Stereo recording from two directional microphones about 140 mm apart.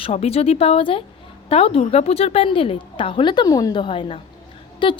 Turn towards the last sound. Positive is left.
turn(degrees=35)  # may be behind; listen again after turning